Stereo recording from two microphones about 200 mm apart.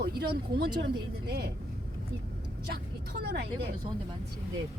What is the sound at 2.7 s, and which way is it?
Speech, 55° right (ahead or behind).